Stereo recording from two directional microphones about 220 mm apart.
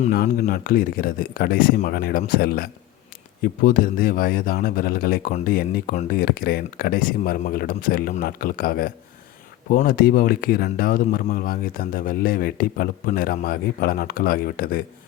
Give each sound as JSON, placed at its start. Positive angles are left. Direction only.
{"t": 0.0, "sound": "speech", "side_deg": 40}